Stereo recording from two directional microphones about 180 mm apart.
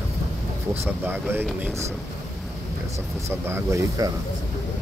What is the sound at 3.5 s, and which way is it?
Speech, 15° right (ahead or behind).